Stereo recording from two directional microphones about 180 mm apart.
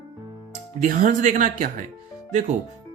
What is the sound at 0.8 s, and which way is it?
Speech, 45° right (ahead or behind).